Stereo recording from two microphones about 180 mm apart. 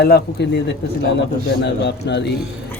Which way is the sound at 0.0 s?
65° left (ahead or behind).